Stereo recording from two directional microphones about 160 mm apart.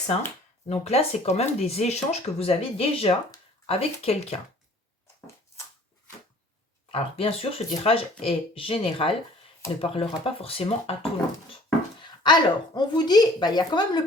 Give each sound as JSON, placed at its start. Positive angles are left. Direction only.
{"t": 0.7, "sound": "speech", "side_deg": 40}
{"t": 6.9, "sound": "speech", "side_deg": 35}